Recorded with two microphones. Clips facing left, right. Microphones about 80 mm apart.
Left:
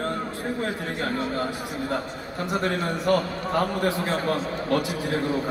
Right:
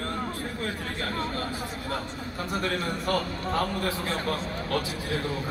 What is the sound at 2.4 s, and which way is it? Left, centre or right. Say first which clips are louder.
A man's voice: left 4 dB; left.